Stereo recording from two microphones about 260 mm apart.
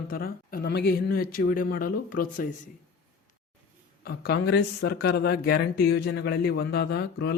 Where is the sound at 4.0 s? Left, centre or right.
Left.